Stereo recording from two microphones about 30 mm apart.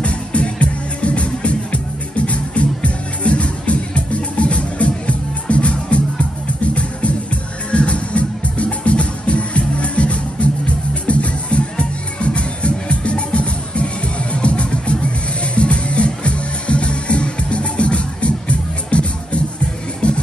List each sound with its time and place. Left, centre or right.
0.0 s music: left